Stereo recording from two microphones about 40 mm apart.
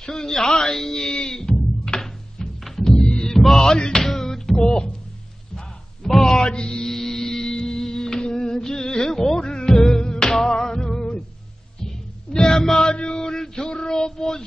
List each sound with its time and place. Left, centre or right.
0.1 s speech: centre
0.7 s a sound: centre
2.0 s music: centre
2.9 s music: left
3.3 s music: centre
6.8 s music: centre
12.9 s male singing: centre
13.7 s child singing: left